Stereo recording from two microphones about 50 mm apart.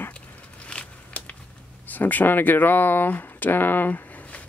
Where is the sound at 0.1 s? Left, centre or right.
Left.